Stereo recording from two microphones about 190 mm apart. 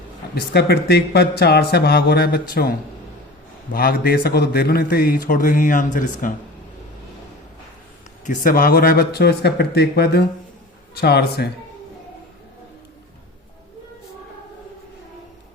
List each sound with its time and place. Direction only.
0.3 s speech: 60° left (ahead or behind)
3.7 s a man's voice: 50° left (ahead or behind)
8.2 s speech: 45° left (ahead or behind)